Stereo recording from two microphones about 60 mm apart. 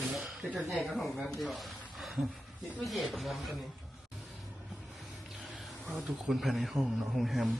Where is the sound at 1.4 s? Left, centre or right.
Centre.